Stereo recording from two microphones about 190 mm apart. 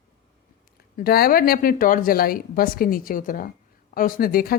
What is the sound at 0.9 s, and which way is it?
Speech, 50° left (ahead or behind).